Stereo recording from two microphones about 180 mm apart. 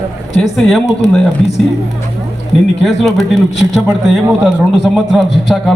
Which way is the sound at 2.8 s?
Centre (ahead or behind).